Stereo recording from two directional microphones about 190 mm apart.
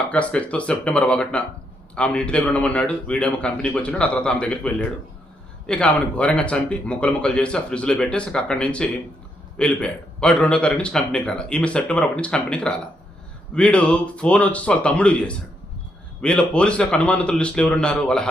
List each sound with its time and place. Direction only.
0.1 s speech: 5° left (ahead or behind)